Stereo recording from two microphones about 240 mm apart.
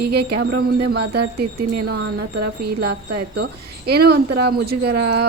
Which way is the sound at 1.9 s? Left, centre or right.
Right.